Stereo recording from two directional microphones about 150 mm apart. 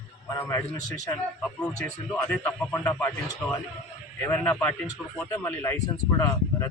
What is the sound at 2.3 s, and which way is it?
Speech, 15° left (ahead or behind).